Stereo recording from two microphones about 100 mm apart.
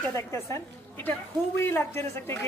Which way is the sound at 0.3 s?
30° left (ahead or behind).